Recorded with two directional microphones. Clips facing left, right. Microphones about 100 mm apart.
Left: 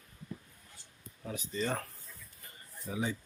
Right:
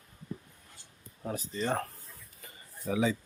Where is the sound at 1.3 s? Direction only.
40° right (ahead or behind).